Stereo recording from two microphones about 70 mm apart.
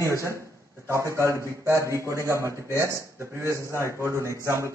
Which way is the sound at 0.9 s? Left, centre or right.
Right.